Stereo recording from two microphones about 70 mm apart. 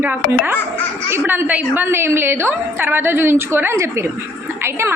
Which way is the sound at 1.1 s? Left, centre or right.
Right.